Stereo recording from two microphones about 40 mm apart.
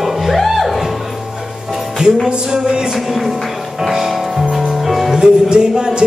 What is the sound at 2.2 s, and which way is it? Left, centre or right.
Music, centre.